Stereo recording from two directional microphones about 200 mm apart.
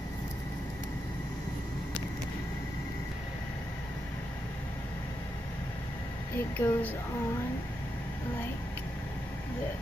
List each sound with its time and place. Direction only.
6.3 s speech: 10° left (ahead or behind)